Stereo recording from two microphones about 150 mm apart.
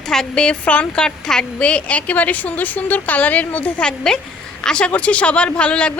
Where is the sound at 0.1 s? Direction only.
5° left (ahead or behind).